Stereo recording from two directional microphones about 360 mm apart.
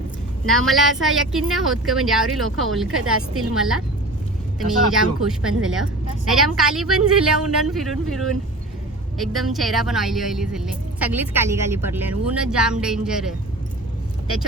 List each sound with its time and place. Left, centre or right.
0.4 s speech: centre
3.0 s a woman's voice: right
3.5 s speech: centre
4.9 s speech: centre